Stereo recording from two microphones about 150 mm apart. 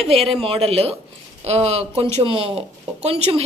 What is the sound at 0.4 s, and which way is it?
Speech, 40° right (ahead or behind).